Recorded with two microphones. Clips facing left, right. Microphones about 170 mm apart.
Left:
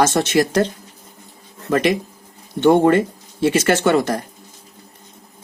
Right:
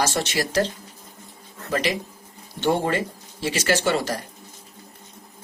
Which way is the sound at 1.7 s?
55° left (ahead or behind).